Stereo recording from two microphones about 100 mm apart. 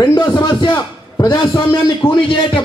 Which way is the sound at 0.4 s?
50° left (ahead or behind).